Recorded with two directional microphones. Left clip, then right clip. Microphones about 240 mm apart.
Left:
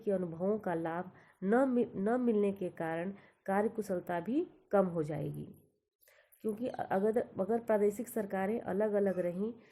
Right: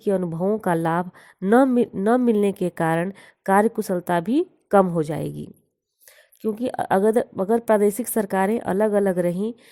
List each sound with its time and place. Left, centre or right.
0.0 s a woman's voice: right
6.4 s a woman's voice: right